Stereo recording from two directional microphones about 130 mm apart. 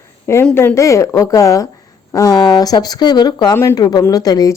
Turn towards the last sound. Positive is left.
turn(degrees=30)  # may be behind; listen again after turning